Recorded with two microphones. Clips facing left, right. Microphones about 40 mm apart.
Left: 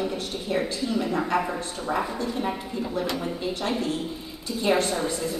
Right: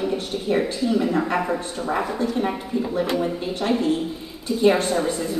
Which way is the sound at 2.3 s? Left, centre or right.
Centre.